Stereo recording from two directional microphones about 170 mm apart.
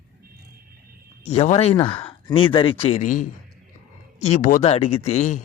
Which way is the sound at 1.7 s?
25° left (ahead or behind).